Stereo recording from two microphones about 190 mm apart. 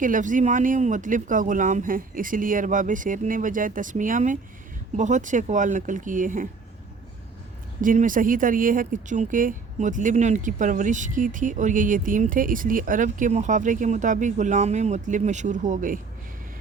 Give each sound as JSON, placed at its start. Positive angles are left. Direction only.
{"t": 0.0, "sound": "speech", "side_deg": -45}
{"t": 7.8, "sound": "speech", "side_deg": -45}